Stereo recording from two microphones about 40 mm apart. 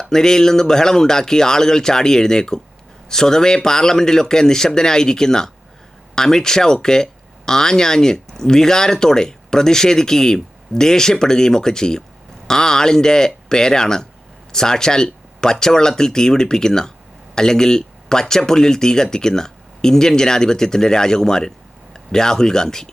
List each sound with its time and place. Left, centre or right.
0.0 s speech: centre